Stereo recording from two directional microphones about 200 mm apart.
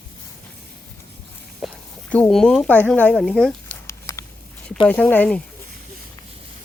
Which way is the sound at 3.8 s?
15° left (ahead or behind).